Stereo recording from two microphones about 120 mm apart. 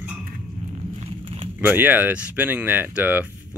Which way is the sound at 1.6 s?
15° right (ahead or behind).